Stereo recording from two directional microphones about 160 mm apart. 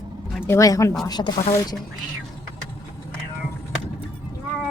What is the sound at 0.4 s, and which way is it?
Speech, 20° left (ahead or behind).